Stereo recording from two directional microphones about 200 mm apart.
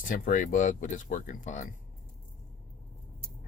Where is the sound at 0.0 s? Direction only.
40° left (ahead or behind).